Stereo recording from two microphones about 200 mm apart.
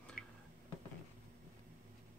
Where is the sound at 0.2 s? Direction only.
50° left (ahead or behind).